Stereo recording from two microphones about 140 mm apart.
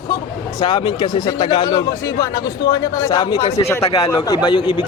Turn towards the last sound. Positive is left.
turn(degrees=35)  # may be behind; listen again after turning